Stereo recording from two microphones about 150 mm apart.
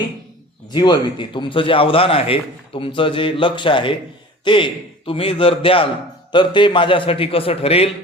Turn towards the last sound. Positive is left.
turn(degrees=40)  # may be behind; listen again after turning